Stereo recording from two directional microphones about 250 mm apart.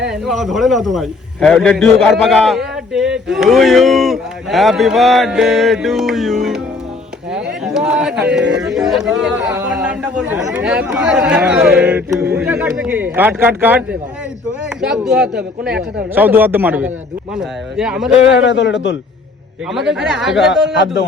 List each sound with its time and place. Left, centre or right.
0.1 s a man's voice: centre
18.4 s speech: left
19.7 s a man's voice: centre